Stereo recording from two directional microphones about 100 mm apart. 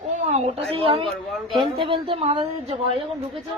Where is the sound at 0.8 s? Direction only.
65° right (ahead or behind).